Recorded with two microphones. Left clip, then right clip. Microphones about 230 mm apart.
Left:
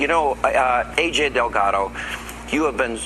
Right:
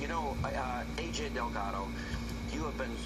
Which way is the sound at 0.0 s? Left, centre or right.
Left.